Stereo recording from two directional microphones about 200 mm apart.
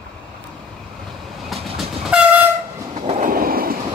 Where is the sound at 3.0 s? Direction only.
35° right (ahead or behind).